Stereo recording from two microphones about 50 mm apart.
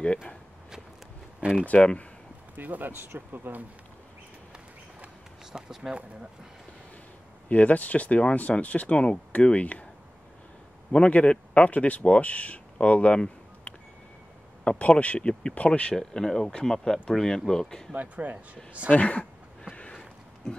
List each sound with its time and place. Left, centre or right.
1.4 s speech: centre
1.7 s speech: left
2.5 s speech: right
5.5 s speech: centre
7.4 s speech: left
10.9 s speech: left
15.9 s speech: centre
17.9 s speech: right
18.9 s speech: left
19.7 s a sound: left
20.4 s speech: centre